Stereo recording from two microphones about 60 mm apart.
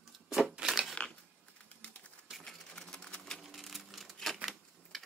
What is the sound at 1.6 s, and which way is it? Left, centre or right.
Typewriter, left.